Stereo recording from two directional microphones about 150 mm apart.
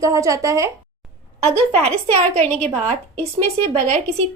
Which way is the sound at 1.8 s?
45° right (ahead or behind).